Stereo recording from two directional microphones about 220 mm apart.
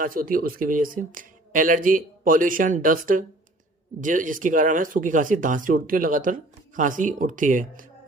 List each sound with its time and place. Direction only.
0.0 s speech: 40° right (ahead or behind)